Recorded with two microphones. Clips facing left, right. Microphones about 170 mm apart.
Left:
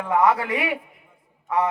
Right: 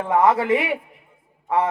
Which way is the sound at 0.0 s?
25° right (ahead or behind).